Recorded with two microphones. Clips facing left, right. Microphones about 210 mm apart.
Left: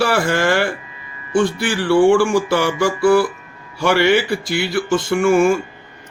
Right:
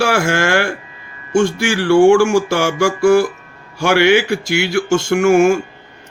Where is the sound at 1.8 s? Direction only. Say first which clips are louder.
Right 3 dB; 45° right (ahead or behind).